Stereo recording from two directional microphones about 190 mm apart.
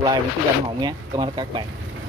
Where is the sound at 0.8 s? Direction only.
25° right (ahead or behind).